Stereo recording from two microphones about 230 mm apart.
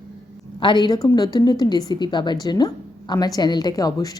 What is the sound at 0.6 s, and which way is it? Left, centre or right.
A woman's voice, centre.